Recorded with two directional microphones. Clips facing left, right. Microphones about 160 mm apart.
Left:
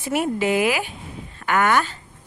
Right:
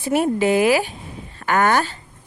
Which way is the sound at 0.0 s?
35° right (ahead or behind).